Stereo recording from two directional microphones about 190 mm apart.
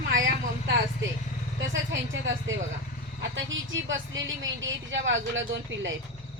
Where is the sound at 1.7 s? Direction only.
85° right.